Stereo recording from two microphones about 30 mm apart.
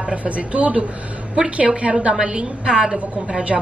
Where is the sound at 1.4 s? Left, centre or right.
Right.